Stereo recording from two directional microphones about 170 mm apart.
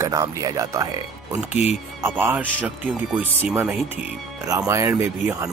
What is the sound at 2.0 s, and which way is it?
Speech, 15° right (ahead or behind).